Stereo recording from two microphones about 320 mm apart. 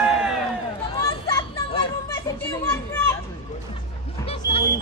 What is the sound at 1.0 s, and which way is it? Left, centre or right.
Children playing, centre.